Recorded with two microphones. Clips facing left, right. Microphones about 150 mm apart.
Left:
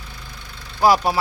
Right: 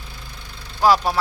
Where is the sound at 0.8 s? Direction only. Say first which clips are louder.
Left 1 dB; 10° left (ahead or behind).